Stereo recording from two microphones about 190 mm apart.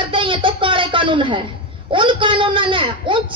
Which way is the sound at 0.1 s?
25° right (ahead or behind).